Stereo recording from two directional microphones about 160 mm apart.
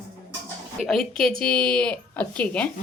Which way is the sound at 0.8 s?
Centre (ahead or behind).